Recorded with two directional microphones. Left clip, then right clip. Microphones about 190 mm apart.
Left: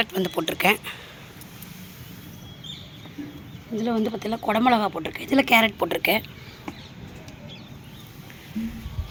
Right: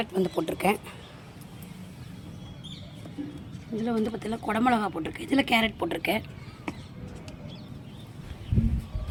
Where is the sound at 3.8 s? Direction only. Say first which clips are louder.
Left 4 dB; 30° left (ahead or behind); by 6.3 s 10° left (ahead or behind).